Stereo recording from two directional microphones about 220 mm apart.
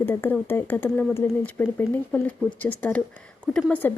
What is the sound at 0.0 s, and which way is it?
Speech, 10° left (ahead or behind).